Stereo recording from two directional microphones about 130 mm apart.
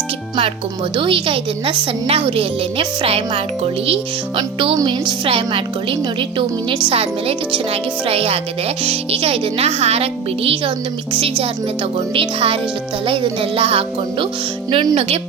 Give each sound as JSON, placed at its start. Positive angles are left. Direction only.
{"t": 0.9, "sound": "speech", "side_deg": -40}
{"t": 14.7, "sound": "speech", "side_deg": -35}